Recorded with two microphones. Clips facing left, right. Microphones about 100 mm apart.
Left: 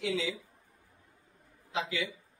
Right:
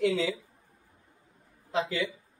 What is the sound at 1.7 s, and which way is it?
Speech, 40° right (ahead or behind).